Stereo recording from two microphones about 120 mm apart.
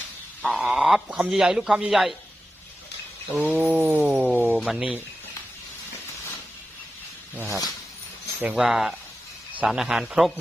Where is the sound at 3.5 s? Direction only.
15° right (ahead or behind).